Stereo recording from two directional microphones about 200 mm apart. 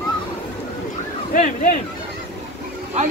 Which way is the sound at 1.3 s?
40° left (ahead or behind).